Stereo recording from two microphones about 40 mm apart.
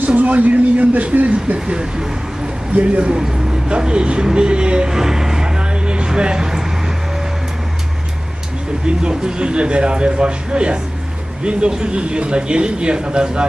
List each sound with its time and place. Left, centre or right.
0.2 s speech: right
1.5 s a man's voice: right
2.7 s speech: right
3.0 s a man's voice: right
4.9 s vehicle: centre
6.1 s speech: right
8.9 s a man's voice: right